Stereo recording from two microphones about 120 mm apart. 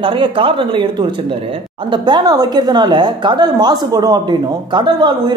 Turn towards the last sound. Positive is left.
turn(degrees=-40)  # may be behind; listen again after turning